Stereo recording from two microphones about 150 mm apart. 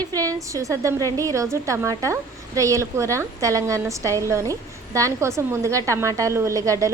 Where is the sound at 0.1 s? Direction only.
25° right (ahead or behind).